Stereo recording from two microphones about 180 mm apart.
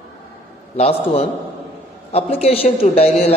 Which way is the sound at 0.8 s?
35° left (ahead or behind).